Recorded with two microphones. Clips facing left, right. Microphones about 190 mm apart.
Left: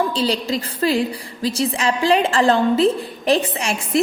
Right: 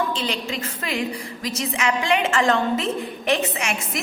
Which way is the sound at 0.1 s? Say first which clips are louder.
Left 6 dB; 35° left (ahead or behind).